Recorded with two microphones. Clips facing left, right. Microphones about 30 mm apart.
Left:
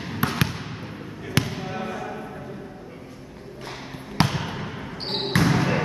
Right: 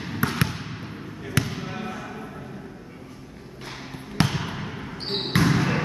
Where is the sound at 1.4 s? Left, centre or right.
Centre.